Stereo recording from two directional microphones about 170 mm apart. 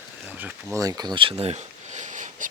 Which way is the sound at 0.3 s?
10° right (ahead or behind).